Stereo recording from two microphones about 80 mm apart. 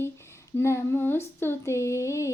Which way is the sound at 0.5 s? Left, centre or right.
Left.